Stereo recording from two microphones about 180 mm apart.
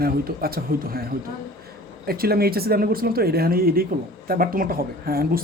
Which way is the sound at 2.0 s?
55° right (ahead or behind).